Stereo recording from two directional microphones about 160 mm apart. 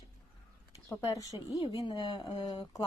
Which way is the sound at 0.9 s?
20° left (ahead or behind).